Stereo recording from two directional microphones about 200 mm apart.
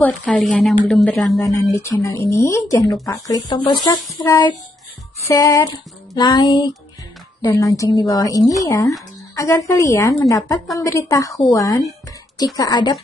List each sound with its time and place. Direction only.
0.0 s a woman's voice: 5° left (ahead or behind)
1.4 s a woman's voice: 15° left (ahead or behind)